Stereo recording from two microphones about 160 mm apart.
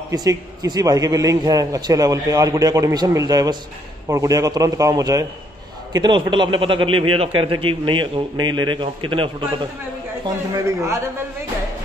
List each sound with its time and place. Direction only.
0.1 s a man's voice: 25° right (ahead or behind)
10.5 s a man's voice: 20° right (ahead or behind)